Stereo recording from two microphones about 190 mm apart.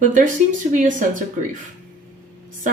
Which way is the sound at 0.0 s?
40° right (ahead or behind).